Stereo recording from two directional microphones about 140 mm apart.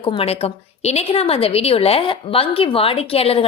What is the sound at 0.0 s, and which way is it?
A woman's voice, 40° left (ahead or behind).